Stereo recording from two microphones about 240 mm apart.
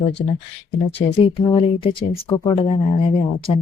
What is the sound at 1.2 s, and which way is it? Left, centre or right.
Speech, left.